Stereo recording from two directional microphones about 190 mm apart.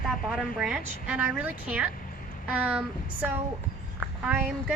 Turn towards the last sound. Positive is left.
turn(degrees=-5)  # may be behind; listen again after turning